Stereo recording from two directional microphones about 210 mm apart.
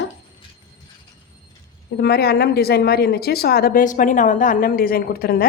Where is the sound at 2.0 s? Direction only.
50° left (ahead or behind).